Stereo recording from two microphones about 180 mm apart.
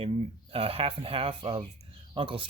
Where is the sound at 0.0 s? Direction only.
30° right (ahead or behind).